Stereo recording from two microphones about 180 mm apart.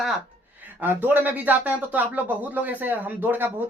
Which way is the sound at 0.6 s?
10° right (ahead or behind).